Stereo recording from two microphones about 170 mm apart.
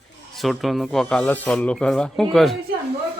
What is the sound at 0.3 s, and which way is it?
Speech, centre (ahead or behind).